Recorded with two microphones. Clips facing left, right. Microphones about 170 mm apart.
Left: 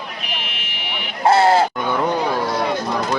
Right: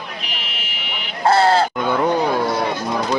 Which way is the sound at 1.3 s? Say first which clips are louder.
Left 1 dB; 20° left (ahead or behind).